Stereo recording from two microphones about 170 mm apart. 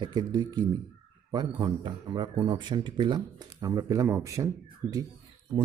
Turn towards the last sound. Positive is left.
turn(degrees=-20)  # may be behind; listen again after turning